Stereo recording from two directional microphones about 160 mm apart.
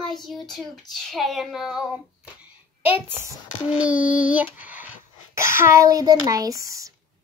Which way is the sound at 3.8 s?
10° right (ahead or behind).